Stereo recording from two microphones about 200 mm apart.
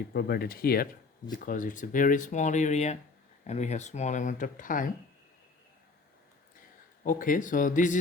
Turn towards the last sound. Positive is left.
turn(degrees=40)  # may be behind; listen again after turning